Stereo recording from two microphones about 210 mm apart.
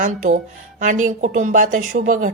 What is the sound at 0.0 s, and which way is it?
Speech, 35° right (ahead or behind).